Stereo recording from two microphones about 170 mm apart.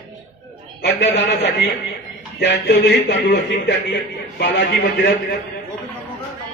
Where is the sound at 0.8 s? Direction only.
85° left.